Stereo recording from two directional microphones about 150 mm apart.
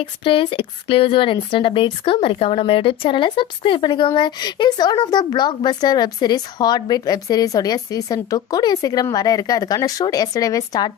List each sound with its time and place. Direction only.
0.0 s a woman's voice: 35° left (ahead or behind)